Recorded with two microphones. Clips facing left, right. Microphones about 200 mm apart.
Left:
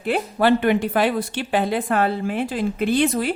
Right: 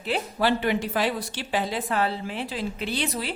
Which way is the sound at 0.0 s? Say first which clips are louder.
Left 6 dB; 55° left (ahead or behind).